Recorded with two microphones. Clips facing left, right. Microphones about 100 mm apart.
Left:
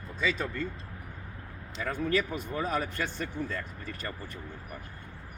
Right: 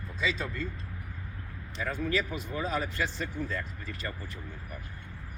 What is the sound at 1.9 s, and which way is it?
Speech, 50° left (ahead or behind).